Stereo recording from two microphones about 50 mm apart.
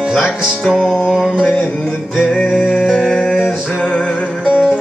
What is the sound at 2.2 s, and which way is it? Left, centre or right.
Music, centre.